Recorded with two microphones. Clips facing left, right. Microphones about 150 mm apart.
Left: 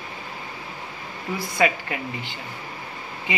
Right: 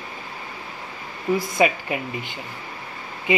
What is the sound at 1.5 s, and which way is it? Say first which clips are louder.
Speech: left 2 dB; 20° right (ahead or behind).